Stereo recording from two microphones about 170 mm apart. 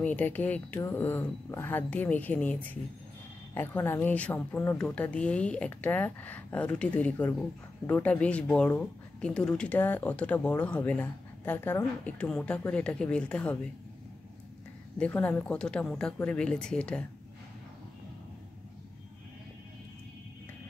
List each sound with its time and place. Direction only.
0.0 s speech: 10° left (ahead or behind)
15.0 s speech: 10° left (ahead or behind)